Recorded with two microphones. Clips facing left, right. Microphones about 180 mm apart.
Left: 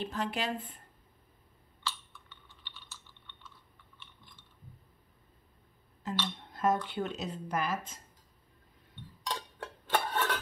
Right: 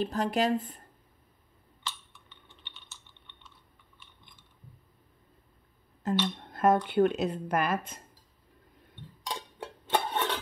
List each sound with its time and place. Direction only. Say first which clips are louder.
0.0 s speech: right 7 dB; 40° right (ahead or behind)
1.9 s typing: left 2 dB; 20° right (ahead or behind)
6.0 s speech: right 7 dB; 50° right (ahead or behind)
9.3 s a sound: right 1 dB; 20° right (ahead or behind)